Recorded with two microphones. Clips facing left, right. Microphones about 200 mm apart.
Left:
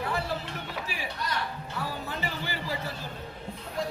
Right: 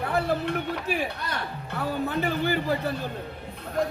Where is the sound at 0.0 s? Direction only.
55° right (ahead or behind).